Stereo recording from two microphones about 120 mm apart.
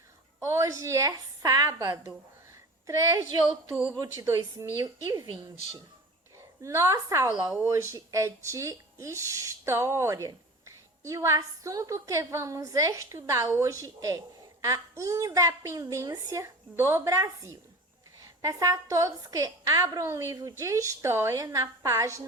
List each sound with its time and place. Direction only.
0.4 s a woman's voice: 25° right (ahead or behind)
6.6 s a woman's voice: 25° right (ahead or behind)